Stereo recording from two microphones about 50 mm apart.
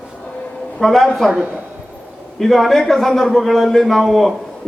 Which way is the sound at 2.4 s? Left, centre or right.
Centre.